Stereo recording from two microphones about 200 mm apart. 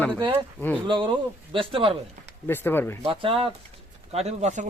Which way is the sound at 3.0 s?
25° right (ahead or behind).